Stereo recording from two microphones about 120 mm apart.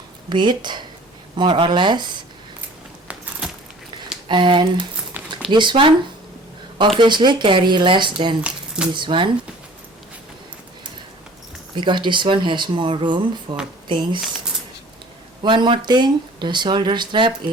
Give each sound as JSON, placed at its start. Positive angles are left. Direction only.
{"t": 0.3, "sound": "speech", "side_deg": -40}
{"t": 4.3, "sound": "speech", "side_deg": -40}
{"t": 5.2, "sound": "zipper", "side_deg": -15}
{"t": 5.5, "sound": "speech", "side_deg": -40}
{"t": 7.0, "sound": "speech", "side_deg": -40}
{"t": 8.4, "sound": "speech", "side_deg": -5}
{"t": 8.9, "sound": "speech", "side_deg": -40}
{"t": 11.7, "sound": "speech", "side_deg": -40}
{"t": 15.4, "sound": "speech", "side_deg": -40}